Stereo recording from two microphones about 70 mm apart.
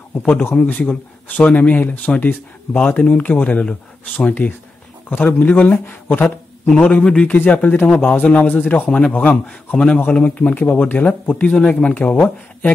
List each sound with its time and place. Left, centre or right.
0.3 s speech: left
0.6 s speech: left
3.6 s speech: centre
4.3 s speech: left
6.7 s speech: centre